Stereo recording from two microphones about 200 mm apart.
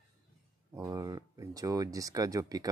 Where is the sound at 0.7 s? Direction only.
15° right (ahead or behind).